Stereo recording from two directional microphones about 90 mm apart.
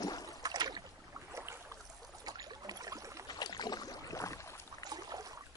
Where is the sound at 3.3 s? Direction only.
50° left (ahead or behind); by 4.9 s 35° left (ahead or behind).